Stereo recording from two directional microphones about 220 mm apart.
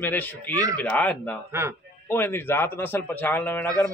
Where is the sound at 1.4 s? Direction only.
15° right (ahead or behind).